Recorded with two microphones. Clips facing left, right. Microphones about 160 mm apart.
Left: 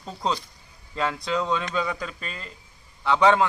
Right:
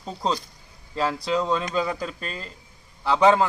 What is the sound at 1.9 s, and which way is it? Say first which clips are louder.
Speech: right 2 dB; 35° right (ahead or behind).